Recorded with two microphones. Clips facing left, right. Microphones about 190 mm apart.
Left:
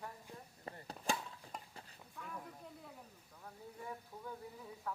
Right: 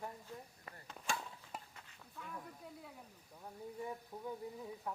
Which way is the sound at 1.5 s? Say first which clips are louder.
Right 1 dB; 5° right (ahead or behind).